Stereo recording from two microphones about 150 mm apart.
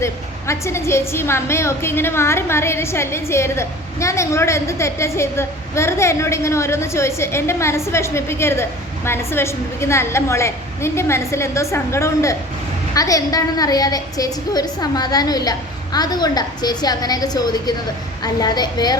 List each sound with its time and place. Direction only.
0.0 s a woman's voice: 20° left (ahead or behind)